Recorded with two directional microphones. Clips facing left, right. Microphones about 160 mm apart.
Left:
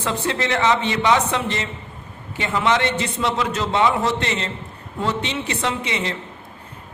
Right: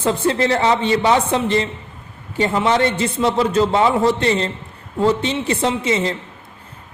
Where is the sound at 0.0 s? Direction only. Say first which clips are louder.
Right 6 dB; 35° right (ahead or behind).